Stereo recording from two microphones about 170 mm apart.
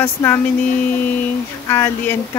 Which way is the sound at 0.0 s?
15° left (ahead or behind).